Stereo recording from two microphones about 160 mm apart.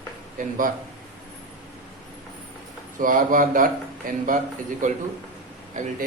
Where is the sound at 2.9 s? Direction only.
55° right (ahead or behind).